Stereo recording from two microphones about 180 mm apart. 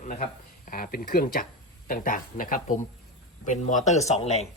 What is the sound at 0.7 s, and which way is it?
Speech, 55° left (ahead or behind).